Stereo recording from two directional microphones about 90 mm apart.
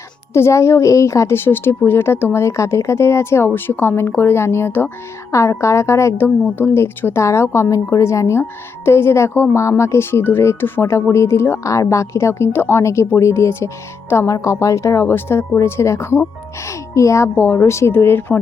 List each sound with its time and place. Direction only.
0.3 s a woman's voice: 30° left (ahead or behind)